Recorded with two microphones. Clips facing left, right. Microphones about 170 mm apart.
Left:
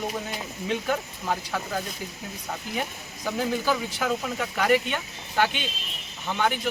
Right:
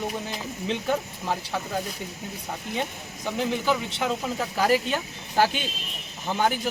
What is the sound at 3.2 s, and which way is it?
Speech, 20° right (ahead or behind).